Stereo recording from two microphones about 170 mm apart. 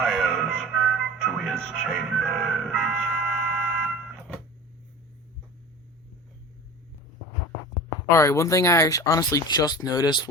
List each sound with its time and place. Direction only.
0.0 s music: centre (ahead or behind)
8.1 s speech: 15° left (ahead or behind)